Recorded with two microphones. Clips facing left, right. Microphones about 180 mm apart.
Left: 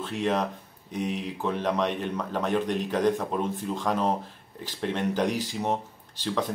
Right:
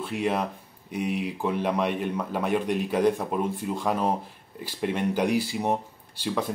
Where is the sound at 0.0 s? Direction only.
10° right (ahead or behind).